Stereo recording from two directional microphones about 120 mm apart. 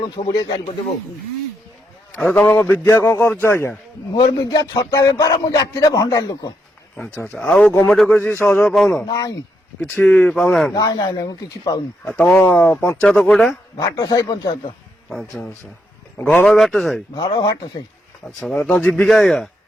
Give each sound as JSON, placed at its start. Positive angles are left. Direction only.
{"t": 0.3, "sound": "speech", "side_deg": 40}
{"t": 2.3, "sound": "a man's voice", "side_deg": 15}
{"t": 4.1, "sound": "speech", "side_deg": 35}
{"t": 6.9, "sound": "speech", "side_deg": 5}
{"t": 8.6, "sound": "speech", "side_deg": 5}
{"t": 9.0, "sound": "speech", "side_deg": 35}
{"t": 9.8, "sound": "speech", "side_deg": 10}
{"t": 10.7, "sound": "speech", "side_deg": 30}
{"t": 12.0, "sound": "speech", "side_deg": 10}
{"t": 13.7, "sound": "speech", "side_deg": 30}
{"t": 15.1, "sound": "speech", "side_deg": 0}
{"t": 17.2, "sound": "speech", "side_deg": 35}
{"t": 18.3, "sound": "speech", "side_deg": 5}